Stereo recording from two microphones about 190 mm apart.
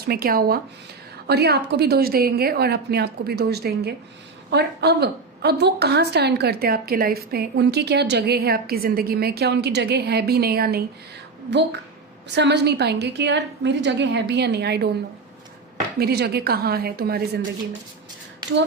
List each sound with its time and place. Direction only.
0.0 s a woman's voice: 50° right (ahead or behind)
12.3 s a woman's voice: 65° right (ahead or behind)
16.0 s a woman's voice: 55° right (ahead or behind)